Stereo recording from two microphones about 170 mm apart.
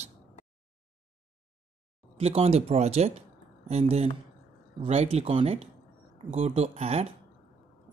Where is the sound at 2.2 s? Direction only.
35° right (ahead or behind).